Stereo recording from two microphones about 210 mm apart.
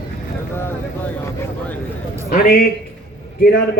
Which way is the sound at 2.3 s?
45° left (ahead or behind).